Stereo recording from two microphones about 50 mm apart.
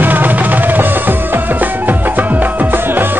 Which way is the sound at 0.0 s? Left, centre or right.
Right.